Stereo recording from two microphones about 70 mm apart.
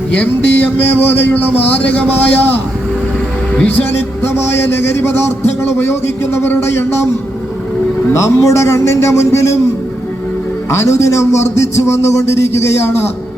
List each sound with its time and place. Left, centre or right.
0.1 s a man's voice: left
3.7 s a man's voice: left
8.1 s a man's voice: left
10.7 s a man's voice: left